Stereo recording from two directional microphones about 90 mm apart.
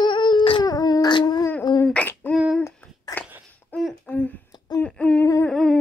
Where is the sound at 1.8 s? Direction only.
20° left (ahead or behind).